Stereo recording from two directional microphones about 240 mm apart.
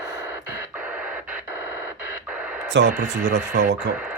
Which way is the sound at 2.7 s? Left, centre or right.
Right.